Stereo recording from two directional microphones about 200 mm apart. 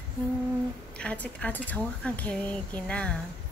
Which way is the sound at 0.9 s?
5° left (ahead or behind).